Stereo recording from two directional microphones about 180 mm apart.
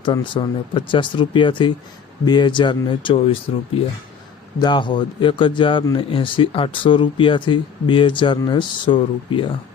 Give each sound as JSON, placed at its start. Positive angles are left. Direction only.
{"t": 0.0, "sound": "a man's voice", "side_deg": 25}
{"t": 4.6, "sound": "a man's voice", "side_deg": 25}